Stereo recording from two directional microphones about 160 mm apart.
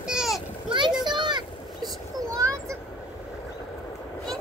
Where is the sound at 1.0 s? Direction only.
30° right (ahead or behind).